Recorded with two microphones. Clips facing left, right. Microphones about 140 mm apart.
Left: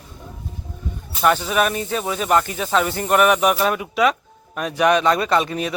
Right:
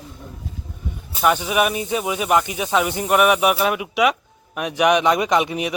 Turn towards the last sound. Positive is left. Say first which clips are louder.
# even
turn(degrees=-15)  # may be behind; listen again after turning